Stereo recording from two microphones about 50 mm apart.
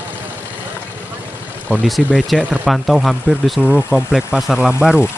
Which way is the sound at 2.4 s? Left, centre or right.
Right.